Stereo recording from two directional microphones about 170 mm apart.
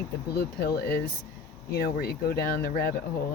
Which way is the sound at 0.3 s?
70° left (ahead or behind).